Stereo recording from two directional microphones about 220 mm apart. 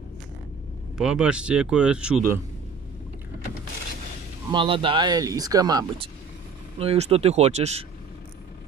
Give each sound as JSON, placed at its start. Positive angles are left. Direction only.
{"t": 0.9, "sound": "speech", "side_deg": -5}
{"t": 4.5, "sound": "speech", "side_deg": -25}
{"t": 6.8, "sound": "speech", "side_deg": -25}